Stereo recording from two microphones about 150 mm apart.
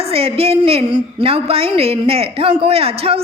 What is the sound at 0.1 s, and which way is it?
A woman's voice, 40° right (ahead or behind).